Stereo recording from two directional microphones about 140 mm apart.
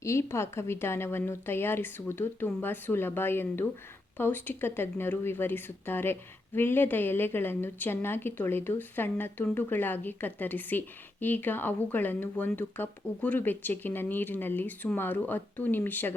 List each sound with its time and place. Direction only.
0.0 s speech: 20° left (ahead or behind)